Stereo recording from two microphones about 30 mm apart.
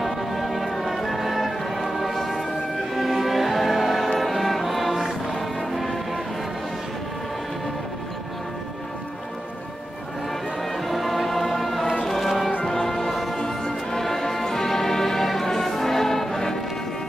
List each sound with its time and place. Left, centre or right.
0.0 s music: centre
10.9 s music: centre
12.6 s music: centre
13.1 s music: centre